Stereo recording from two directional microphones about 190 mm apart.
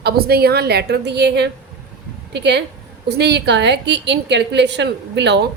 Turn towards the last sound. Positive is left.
turn(degrees=-65)  # may be behind; listen again after turning